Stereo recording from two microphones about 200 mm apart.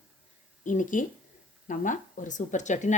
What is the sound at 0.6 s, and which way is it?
Speech, 40° left (ahead or behind).